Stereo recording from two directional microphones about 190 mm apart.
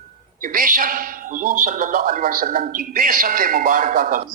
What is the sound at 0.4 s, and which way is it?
A man's voice, 45° right (ahead or behind).